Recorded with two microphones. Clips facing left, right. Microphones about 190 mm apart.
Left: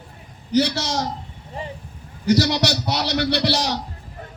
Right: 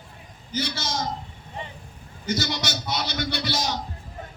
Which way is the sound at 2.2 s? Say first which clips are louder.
Left 9 dB; 65° left (ahead or behind).